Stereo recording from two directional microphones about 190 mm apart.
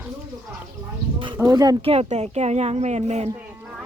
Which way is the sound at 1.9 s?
35° right (ahead or behind).